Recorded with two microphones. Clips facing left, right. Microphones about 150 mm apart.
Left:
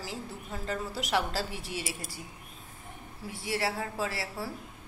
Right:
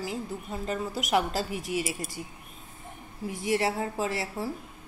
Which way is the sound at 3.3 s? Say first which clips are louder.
Right 5 dB; 20° right (ahead or behind).